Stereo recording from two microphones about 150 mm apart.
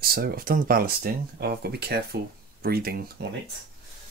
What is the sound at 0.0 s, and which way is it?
Speech, 80° right.